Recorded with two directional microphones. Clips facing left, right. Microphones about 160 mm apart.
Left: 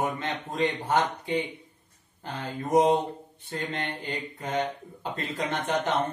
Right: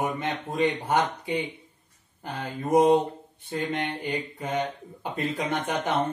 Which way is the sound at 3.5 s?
10° right (ahead or behind).